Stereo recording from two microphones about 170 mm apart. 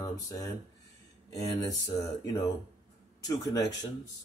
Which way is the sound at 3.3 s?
20° left (ahead or behind).